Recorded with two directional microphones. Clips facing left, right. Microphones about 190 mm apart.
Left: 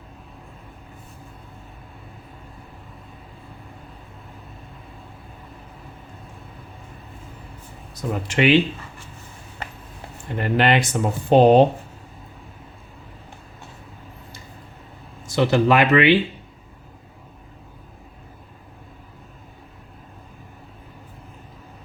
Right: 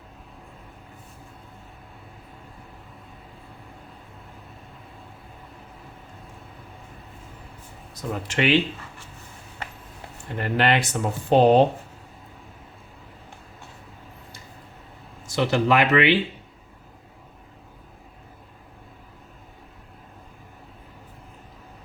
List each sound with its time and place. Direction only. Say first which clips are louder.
8.1 s speech: left 4 dB; 15° left (ahead or behind)
10.3 s speech: left 3 dB; 20° left (ahead or behind)
15.4 s speech: left 3 dB; 30° left (ahead or behind)